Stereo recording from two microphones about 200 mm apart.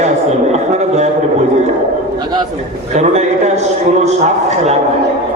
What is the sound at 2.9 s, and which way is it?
A man's voice, 35° right (ahead or behind).